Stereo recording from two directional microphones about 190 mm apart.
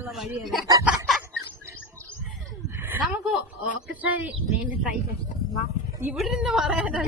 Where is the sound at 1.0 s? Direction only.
Centre (ahead or behind).